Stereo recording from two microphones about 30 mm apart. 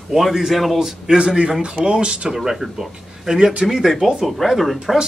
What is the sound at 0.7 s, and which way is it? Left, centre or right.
Speech, centre.